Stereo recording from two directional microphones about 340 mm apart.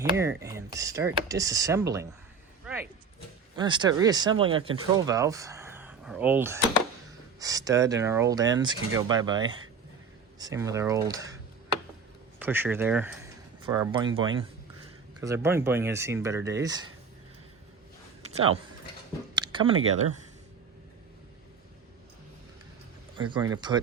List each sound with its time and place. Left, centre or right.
0.0 s speech: centre
2.7 s a sound: centre
3.5 s speech: centre
19.4 s a sound: centre
19.7 s speech: right
23.1 s speech: centre